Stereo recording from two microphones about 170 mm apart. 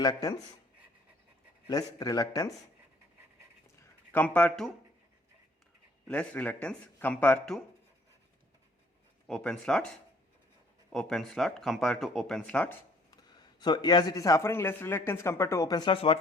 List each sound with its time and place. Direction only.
0.0 s speech: 25° left (ahead or behind)
1.6 s speech: 20° left (ahead or behind)
4.1 s a man's voice: 10° left (ahead or behind)
6.1 s a man's voice: 5° left (ahead or behind)
9.2 s speech: 5° left (ahead or behind)
10.9 s speech: centre (ahead or behind)
13.1 s speech: 25° left (ahead or behind)